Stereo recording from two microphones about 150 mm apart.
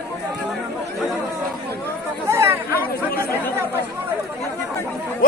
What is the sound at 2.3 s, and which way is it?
Chatter, 15° right (ahead or behind).